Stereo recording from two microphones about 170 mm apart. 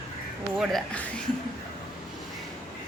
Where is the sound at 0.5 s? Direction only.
Centre (ahead or behind).